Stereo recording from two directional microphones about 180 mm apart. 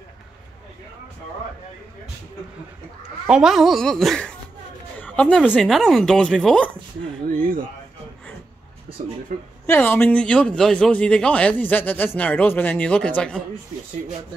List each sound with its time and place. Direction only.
3.3 s speech: 5° right (ahead or behind)
7.2 s speech: 50° right (ahead or behind)
9.3 s speech: 50° right (ahead or behind)
9.7 s a man's voice: 10° left (ahead or behind)